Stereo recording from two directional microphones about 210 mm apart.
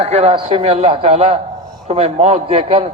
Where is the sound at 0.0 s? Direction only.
30° right (ahead or behind).